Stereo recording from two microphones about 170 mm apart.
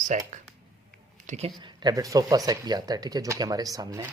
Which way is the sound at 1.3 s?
40° right (ahead or behind).